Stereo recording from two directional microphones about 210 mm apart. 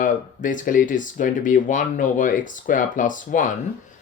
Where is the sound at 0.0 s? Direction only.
40° left (ahead or behind).